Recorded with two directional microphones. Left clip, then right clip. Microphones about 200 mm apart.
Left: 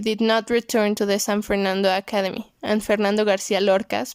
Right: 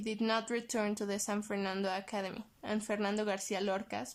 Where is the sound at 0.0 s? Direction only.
40° left (ahead or behind).